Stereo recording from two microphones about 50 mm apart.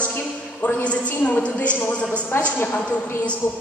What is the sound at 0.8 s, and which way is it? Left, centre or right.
A woman's voice, left.